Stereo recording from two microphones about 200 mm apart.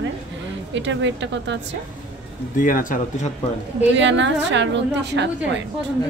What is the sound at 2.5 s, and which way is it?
Speech, 40° left (ahead or behind).